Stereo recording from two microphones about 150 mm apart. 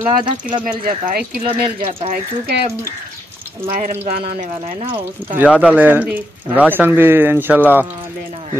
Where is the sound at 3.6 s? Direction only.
65° right (ahead or behind).